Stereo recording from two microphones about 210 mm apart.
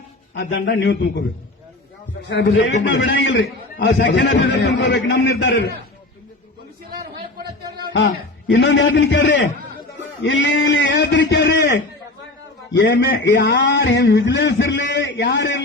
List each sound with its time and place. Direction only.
0.3 s a man's voice: 50° left (ahead or behind)
2.3 s a man's voice: 55° left (ahead or behind)
7.9 s a man's voice: 60° left (ahead or behind)
12.9 s a man's voice: 45° left (ahead or behind)